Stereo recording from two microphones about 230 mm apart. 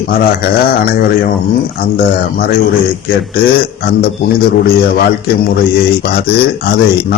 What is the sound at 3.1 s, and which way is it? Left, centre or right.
Speech, left.